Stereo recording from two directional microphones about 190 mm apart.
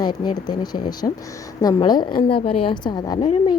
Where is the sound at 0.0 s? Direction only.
20° left (ahead or behind).